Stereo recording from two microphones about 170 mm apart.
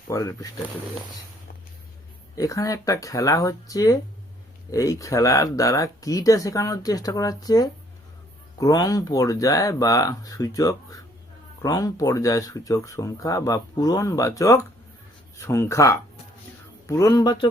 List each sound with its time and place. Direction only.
0.1 s speech: 20° left (ahead or behind)
2.3 s speech: 20° left (ahead or behind)